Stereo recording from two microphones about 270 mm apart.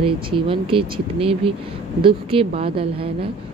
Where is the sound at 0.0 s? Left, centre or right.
Centre.